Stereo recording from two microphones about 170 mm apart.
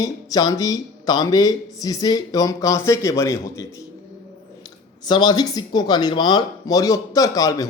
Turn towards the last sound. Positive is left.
turn(degrees=20)  # may be behind; listen again after turning